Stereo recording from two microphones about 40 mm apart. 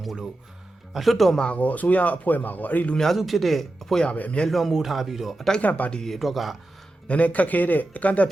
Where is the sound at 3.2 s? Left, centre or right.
Centre.